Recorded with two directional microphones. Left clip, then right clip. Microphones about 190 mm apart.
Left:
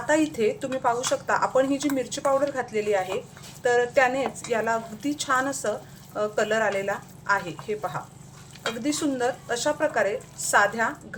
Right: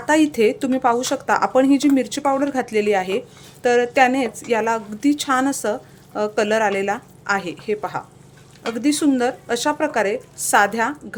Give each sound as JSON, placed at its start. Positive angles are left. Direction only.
{"t": 0.1, "sound": "speech", "side_deg": -45}